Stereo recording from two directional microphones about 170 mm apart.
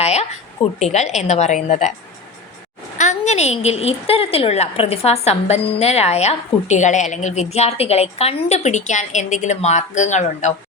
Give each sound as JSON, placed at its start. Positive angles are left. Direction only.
{"t": 0.0, "sound": "a sound", "side_deg": 40}
{"t": 0.8, "sound": "a woman's voice", "side_deg": 40}
{"t": 3.0, "sound": "a woman's voice", "side_deg": 45}